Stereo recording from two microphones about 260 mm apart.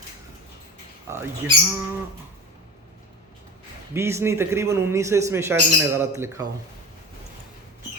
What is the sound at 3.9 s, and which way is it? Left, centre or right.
Speech, centre.